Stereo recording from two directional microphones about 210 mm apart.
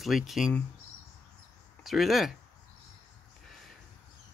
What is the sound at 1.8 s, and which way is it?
Speech, centre (ahead or behind).